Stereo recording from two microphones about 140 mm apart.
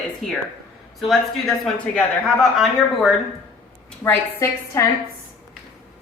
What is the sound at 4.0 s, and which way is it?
Speech, 15° left (ahead or behind).